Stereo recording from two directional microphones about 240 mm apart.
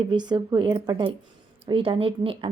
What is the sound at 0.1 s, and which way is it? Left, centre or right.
A woman's voice, centre.